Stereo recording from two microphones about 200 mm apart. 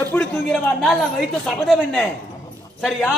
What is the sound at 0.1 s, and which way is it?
A man's voice, 5° left (ahead or behind).